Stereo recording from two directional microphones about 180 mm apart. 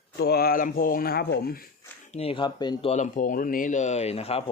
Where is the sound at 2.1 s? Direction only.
35° left (ahead or behind).